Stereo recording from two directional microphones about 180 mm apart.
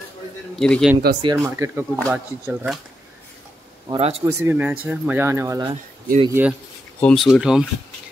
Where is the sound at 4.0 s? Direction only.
35° right (ahead or behind).